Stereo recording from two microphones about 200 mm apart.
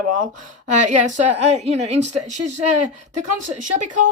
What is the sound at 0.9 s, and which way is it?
A woman's voice, 35° right (ahead or behind).